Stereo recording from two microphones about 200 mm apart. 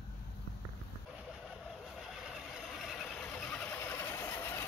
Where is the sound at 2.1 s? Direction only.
Centre (ahead or behind).